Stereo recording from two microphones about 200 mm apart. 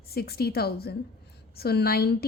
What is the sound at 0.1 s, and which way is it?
A woman's voice, 50° left (ahead or behind).